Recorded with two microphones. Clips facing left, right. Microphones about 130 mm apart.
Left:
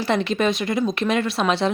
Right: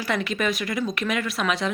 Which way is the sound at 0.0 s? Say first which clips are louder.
Left 5 dB; 25° left (ahead or behind).